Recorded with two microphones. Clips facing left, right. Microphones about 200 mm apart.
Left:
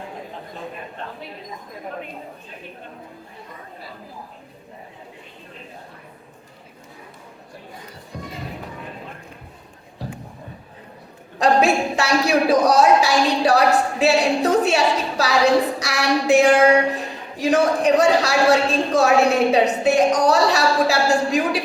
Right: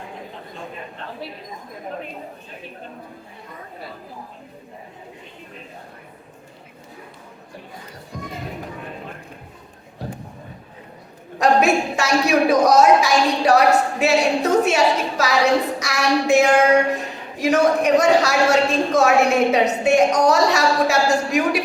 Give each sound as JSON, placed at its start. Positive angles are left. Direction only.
{"t": 11.3, "sound": "speech", "side_deg": 30}